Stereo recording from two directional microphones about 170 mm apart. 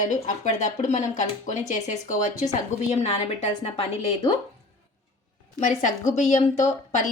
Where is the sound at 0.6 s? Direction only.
45° left (ahead or behind).